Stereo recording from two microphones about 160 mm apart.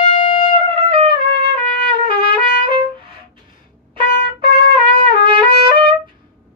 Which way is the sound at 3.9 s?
30° right (ahead or behind).